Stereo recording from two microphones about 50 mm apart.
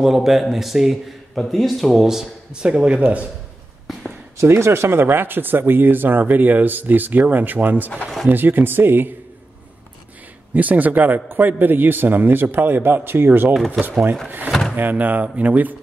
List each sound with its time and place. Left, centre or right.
0.0 s a man's voice: centre; by 3.3 s right
4.4 s speech: right
10.5 s speech: right